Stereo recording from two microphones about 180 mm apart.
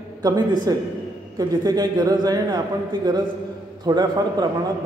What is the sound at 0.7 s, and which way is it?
A man's voice, 20° right (ahead or behind).